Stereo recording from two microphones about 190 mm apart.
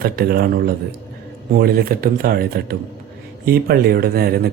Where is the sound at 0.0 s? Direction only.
50° right (ahead or behind).